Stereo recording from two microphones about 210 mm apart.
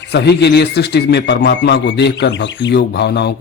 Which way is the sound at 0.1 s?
55° left (ahead or behind).